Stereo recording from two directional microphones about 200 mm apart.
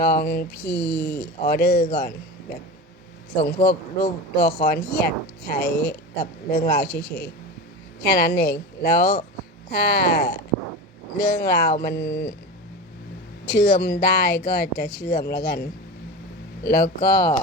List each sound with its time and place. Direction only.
0.0 s speech: 50° left (ahead or behind)
3.4 s speech: 50° left (ahead or behind)
13.4 s speech: 55° left (ahead or behind)